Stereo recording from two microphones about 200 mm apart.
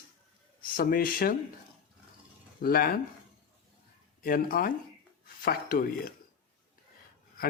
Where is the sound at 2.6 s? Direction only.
50° left (ahead or behind).